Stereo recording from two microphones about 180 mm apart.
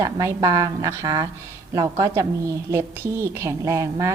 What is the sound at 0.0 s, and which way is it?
A woman's voice, 20° right (ahead or behind).